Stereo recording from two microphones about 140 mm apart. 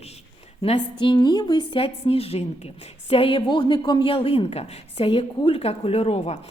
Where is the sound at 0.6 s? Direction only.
40° left (ahead or behind).